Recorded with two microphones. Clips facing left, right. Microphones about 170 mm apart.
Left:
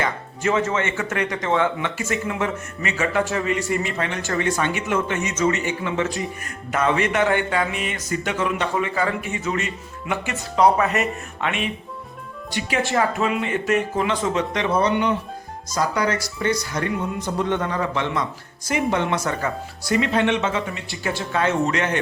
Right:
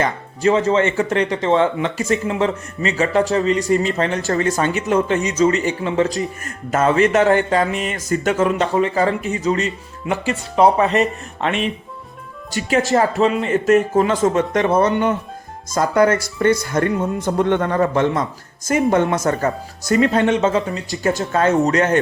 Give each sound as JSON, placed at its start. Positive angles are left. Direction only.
{"t": 0.0, "sound": "speech", "side_deg": -35}